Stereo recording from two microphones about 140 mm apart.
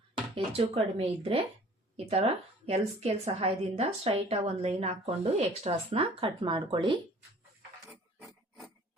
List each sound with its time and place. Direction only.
0.3 s speech: 40° right (ahead or behind)
2.6 s speech: 50° right (ahead or behind)
7.9 s pig: centre (ahead or behind)